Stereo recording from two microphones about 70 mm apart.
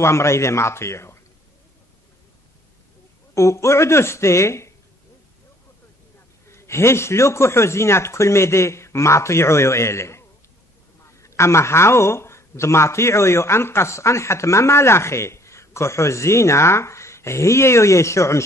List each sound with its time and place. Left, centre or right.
0.0 s a man's voice: left
3.3 s a man's voice: left
6.5 s a man's voice: left